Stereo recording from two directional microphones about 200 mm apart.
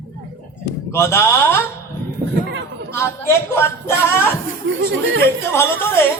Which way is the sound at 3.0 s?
10° left (ahead or behind).